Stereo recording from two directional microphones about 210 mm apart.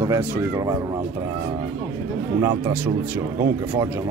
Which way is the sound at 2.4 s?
15° right (ahead or behind).